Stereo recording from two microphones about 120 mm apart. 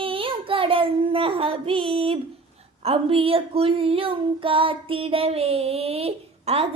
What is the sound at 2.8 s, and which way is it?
Female singing, 50° right (ahead or behind).